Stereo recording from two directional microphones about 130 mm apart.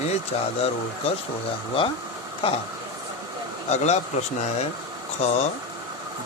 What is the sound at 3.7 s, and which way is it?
Speech, 60° left (ahead or behind).